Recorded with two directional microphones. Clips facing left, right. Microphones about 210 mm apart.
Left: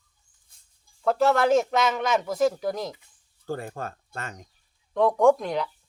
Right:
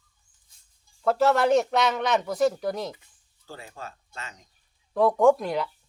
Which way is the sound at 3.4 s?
55° left (ahead or behind).